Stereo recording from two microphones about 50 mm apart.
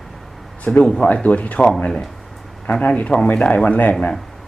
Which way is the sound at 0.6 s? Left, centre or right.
Left.